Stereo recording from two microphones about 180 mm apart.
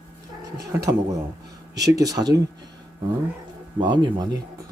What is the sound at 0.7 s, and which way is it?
Speech, 15° right (ahead or behind).